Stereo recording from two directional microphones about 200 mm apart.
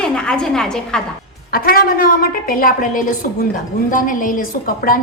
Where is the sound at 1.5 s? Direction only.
50° left (ahead or behind).